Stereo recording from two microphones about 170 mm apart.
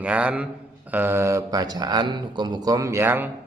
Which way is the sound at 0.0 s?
10° right (ahead or behind).